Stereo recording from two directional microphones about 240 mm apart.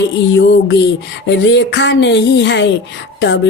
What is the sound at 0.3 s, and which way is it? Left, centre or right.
Speech, left.